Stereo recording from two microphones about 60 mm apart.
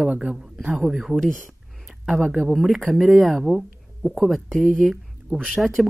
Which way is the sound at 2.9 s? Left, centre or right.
Centre.